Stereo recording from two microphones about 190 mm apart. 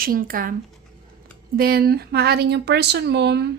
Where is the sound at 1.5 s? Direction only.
55° right (ahead or behind).